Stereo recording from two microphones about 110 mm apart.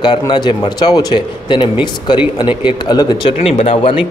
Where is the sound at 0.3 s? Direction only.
45° left (ahead or behind).